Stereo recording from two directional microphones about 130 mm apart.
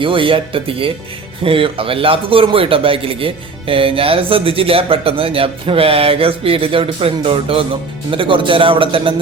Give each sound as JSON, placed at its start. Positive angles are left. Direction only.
{"t": 0.0, "sound": "a man's voice", "side_deg": -40}